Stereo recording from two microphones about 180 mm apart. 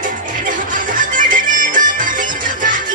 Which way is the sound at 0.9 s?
50° right (ahead or behind).